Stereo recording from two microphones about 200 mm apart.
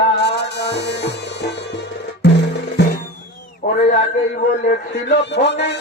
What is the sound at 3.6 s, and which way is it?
Speech, 40° left (ahead or behind).